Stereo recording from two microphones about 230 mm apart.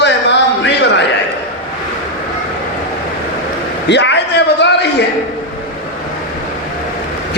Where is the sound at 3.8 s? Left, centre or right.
Left.